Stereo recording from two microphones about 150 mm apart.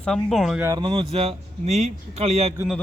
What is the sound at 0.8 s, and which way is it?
A man's voice, 35° right (ahead or behind).